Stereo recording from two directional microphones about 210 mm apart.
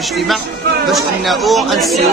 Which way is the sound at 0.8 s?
Centre (ahead or behind).